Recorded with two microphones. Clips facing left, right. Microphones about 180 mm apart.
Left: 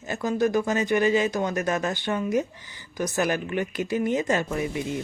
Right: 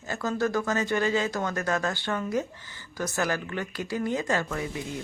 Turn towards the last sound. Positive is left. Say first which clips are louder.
# left 5 dB
turn(degrees=20)  # may be behind; listen again after turning